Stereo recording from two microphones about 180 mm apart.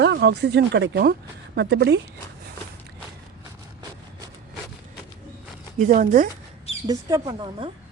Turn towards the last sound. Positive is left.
turn(degrees=-25)  # may be behind; listen again after turning